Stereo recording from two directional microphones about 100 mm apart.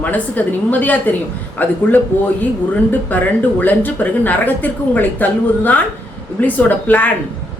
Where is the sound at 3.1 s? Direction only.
15° left (ahead or behind).